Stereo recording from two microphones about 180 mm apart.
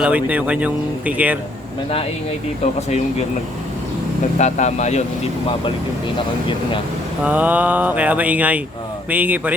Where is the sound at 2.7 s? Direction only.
35° left (ahead or behind).